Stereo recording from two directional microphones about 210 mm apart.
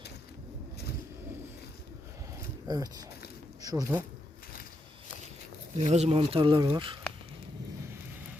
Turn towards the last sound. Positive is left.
turn(degrees=-20)  # may be behind; listen again after turning